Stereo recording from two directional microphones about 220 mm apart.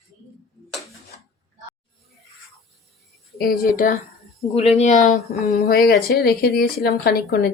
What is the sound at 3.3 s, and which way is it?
Speech, 45° left (ahead or behind).